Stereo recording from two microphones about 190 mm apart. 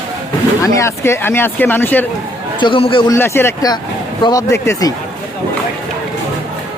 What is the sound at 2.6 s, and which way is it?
Speech, 25° left (ahead or behind).